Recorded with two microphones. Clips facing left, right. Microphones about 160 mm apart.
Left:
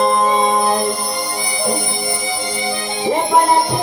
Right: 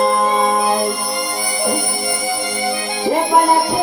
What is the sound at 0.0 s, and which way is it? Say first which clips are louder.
Music: even; 20° left (ahead or behind).